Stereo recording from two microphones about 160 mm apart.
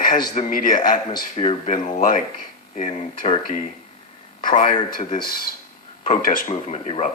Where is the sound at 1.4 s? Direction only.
45° left (ahead or behind).